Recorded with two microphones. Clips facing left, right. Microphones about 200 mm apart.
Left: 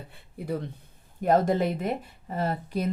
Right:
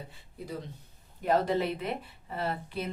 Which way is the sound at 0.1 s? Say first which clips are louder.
Left 6 dB; 60° left (ahead or behind).